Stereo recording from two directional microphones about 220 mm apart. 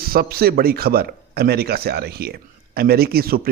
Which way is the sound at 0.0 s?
45° right (ahead or behind).